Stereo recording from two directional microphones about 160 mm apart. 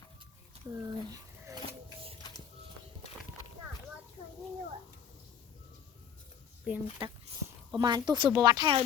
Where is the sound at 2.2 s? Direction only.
25° left (ahead or behind).